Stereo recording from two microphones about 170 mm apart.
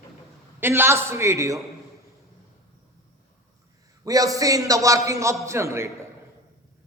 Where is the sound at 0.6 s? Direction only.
15° right (ahead or behind).